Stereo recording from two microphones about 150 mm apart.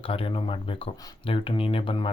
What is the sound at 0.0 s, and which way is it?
Speech, 35° left (ahead or behind).